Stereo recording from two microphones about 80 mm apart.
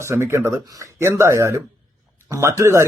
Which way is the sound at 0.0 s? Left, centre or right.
Right.